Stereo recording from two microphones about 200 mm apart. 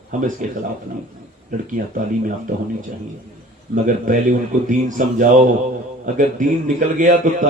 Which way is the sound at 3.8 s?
40° right (ahead or behind).